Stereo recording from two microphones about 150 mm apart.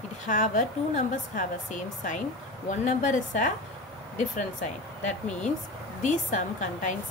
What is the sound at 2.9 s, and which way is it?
Speech, 55° left (ahead or behind).